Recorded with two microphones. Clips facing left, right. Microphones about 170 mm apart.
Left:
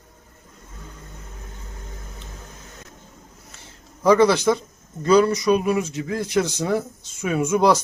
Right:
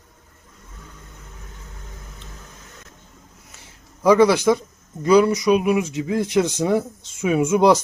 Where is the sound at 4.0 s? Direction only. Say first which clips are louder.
Right 1 dB; 10° right (ahead or behind).